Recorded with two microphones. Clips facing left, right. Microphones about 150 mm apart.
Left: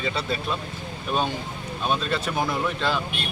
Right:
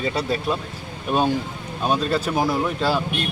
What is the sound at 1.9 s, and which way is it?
Speech, 5° right (ahead or behind).